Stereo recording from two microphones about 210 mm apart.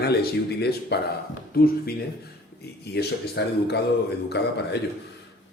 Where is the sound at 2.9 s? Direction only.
55° left (ahead or behind).